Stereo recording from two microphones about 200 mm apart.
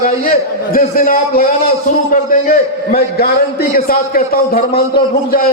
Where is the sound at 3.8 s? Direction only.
45° left (ahead or behind).